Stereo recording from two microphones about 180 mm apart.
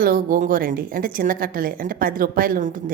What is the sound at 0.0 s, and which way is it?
A woman's voice, 50° right (ahead or behind).